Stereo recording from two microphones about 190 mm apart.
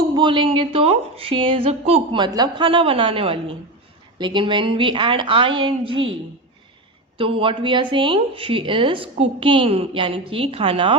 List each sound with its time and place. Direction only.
0.1 s speech: 25° right (ahead or behind)
7.2 s speech: 30° right (ahead or behind)